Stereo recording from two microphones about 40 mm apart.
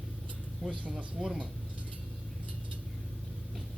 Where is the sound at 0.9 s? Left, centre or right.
Centre.